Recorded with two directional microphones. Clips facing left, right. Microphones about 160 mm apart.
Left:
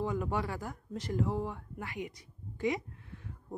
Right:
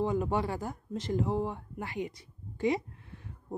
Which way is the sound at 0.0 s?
25° right (ahead or behind).